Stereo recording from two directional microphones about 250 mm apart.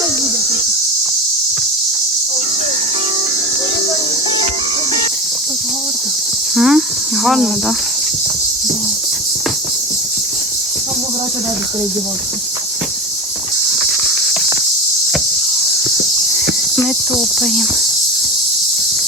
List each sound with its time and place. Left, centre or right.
6.6 s cricket: centre
7.3 s speech: centre